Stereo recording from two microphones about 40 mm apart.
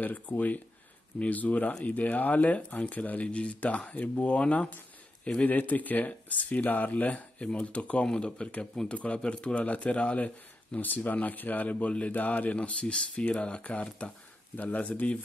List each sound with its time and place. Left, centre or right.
0.0 s speech: left
5.5 s speech: left
8.1 s speech: left